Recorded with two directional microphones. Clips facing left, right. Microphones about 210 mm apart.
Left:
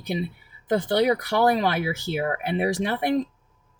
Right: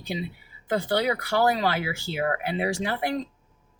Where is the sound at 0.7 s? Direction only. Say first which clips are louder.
Left 4 dB; 20° left (ahead or behind).